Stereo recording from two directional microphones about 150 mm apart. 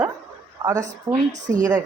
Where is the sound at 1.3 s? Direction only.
55° right (ahead or behind).